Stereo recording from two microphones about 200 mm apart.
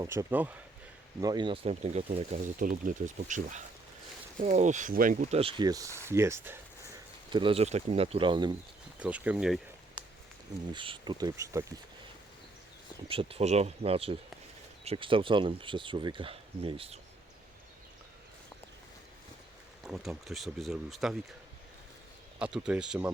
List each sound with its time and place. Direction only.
0.0 s speech: 15° right (ahead or behind)
1.2 s speech: 20° right (ahead or behind)
2.6 s speech: 40° right (ahead or behind)
5.4 s speech: 25° right (ahead or behind)
7.3 s speech: 25° right (ahead or behind)
9.0 s speech: 5° right (ahead or behind)
10.7 s speech: 25° right (ahead or behind)
13.1 s speech: 30° right (ahead or behind)
19.8 s speech: centre (ahead or behind)
22.4 s speech: 5° right (ahead or behind)